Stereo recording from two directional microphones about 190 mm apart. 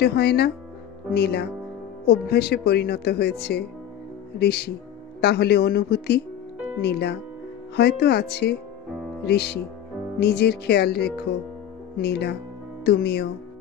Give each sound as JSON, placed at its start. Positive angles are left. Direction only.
{"t": 0.0, "sound": "speech", "side_deg": 55}